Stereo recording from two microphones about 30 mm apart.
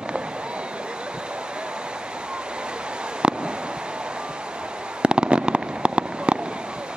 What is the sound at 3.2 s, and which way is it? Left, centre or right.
Fireworks, right.